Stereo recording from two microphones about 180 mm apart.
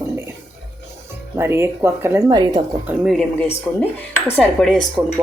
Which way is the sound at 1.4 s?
15° right (ahead or behind).